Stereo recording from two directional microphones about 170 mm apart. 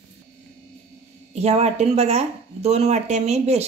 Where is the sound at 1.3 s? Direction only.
40° right (ahead or behind).